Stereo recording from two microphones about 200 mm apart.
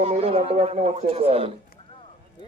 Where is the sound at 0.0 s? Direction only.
30° right (ahead or behind).